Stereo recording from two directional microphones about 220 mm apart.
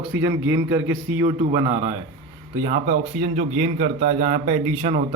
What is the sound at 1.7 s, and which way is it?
Speech, 15° right (ahead or behind).